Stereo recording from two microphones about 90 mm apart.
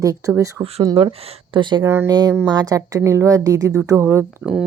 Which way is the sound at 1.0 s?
60° right (ahead or behind).